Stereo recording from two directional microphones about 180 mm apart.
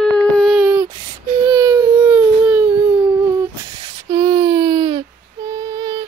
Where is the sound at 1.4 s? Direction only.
15° right (ahead or behind).